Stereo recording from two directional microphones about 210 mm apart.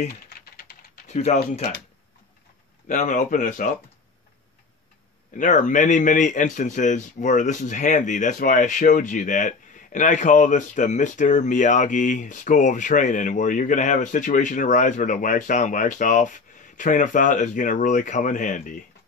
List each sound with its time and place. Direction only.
0.0 s typing: 45° left (ahead or behind)
2.9 s speech: 35° left (ahead or behind)
5.4 s speech: 35° left (ahead or behind)